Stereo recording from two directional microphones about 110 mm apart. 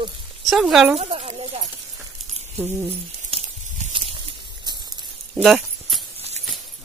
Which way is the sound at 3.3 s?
60° right (ahead or behind).